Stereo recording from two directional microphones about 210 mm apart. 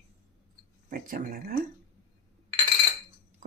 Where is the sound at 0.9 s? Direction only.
40° right (ahead or behind).